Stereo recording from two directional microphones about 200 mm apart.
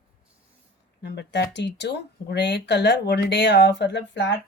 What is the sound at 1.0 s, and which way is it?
A woman's voice, 60° left (ahead or behind).